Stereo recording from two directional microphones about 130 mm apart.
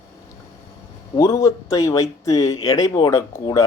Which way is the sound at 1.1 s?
25° left (ahead or behind).